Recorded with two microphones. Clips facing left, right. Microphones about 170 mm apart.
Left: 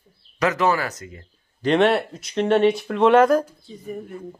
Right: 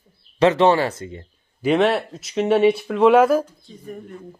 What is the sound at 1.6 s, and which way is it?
Speech, 5° right (ahead or behind).